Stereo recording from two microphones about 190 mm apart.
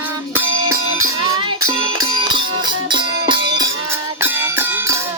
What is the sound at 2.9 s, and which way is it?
Music, 25° right (ahead or behind).